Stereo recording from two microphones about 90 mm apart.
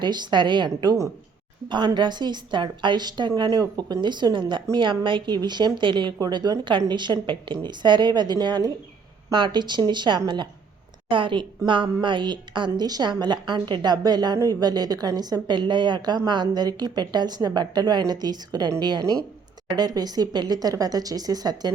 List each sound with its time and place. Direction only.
0.0 s a woman's voice: 55° right (ahead or behind)
6.1 s a woman's voice: 50° right (ahead or behind)
11.1 s a woman's voice: 70° right (ahead or behind); by 21.7 s 45° right (ahead or behind)